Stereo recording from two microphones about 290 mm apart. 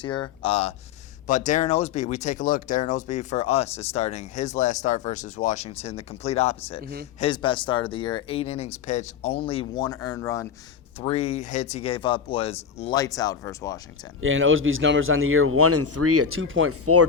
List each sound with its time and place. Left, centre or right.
0.0 s speech: centre
6.8 s speech: right
7.2 s speech: centre
11.0 s speech: left
14.2 s speech: right